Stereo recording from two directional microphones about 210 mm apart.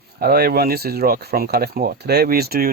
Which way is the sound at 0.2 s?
45° right (ahead or behind).